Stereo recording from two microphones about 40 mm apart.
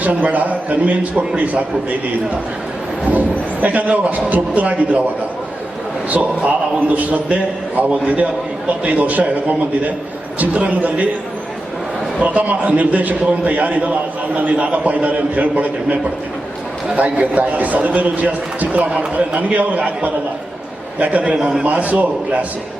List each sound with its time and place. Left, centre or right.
0.0 s a man's voice: right
3.0 s a man's voice: right
12.2 s a man's voice: right
17.0 s a man's voice: right
21.3 s a man's voice: centre
21.7 s a man's voice: right